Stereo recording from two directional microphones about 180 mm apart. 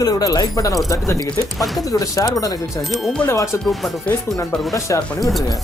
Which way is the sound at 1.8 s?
20° left (ahead or behind).